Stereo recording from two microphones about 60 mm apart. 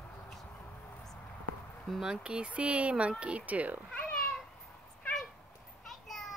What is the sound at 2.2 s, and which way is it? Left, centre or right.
Speech, centre.